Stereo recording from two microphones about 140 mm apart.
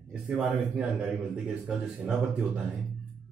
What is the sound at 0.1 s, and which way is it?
A man's voice, 5° right (ahead or behind).